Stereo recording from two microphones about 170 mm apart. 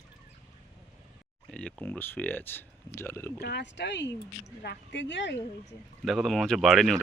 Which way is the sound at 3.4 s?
75° left (ahead or behind).